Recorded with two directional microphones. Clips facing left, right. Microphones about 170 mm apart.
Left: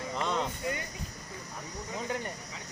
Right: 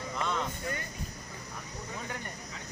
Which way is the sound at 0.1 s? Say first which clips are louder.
Left 2 dB; 25° left (ahead or behind).